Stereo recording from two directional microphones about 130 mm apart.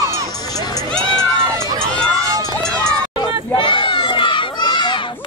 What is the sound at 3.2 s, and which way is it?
Crowd, 40° left (ahead or behind).